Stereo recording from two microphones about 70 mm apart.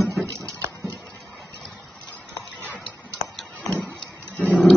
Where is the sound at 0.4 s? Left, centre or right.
Right.